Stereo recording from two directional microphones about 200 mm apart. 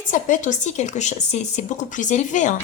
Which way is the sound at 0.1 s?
40° left (ahead or behind).